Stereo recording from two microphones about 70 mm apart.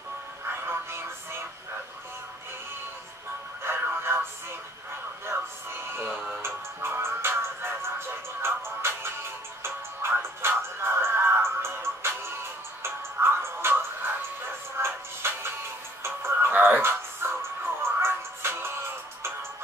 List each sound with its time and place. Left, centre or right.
0.7 s music: right
3.6 s music: right
5.2 s music: right
6.0 s music: centre
6.4 s music: right
16.5 s music: right
16.8 s music: right